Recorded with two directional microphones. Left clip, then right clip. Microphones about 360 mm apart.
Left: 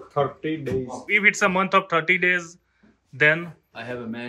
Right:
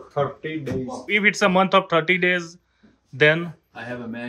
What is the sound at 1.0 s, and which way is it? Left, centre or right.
Speech, centre.